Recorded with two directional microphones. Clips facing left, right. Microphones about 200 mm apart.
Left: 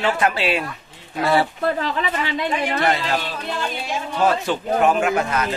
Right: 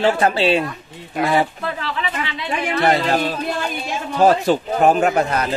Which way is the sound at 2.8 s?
45° right (ahead or behind).